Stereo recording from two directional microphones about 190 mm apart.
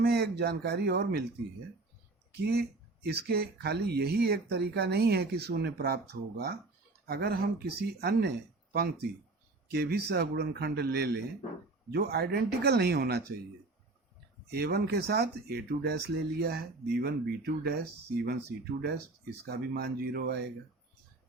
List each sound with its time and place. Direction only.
0.0 s speech: 55° right (ahead or behind)
2.3 s speech: 55° right (ahead or behind)
8.7 s speech: 55° right (ahead or behind)
14.5 s speech: 55° right (ahead or behind)